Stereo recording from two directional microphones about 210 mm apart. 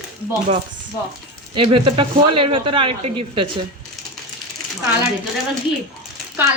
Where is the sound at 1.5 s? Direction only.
25° right (ahead or behind).